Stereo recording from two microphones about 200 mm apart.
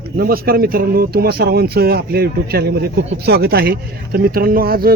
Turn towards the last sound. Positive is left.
turn(degrees=-50)  # may be behind; listen again after turning